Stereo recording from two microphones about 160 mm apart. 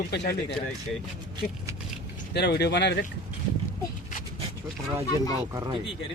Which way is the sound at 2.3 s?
90° left.